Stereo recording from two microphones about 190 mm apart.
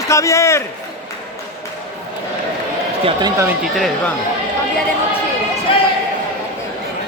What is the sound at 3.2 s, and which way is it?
Speech, 15° right (ahead or behind).